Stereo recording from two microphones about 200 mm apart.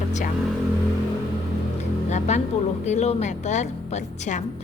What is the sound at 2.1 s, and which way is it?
A woman's voice, 35° left (ahead or behind).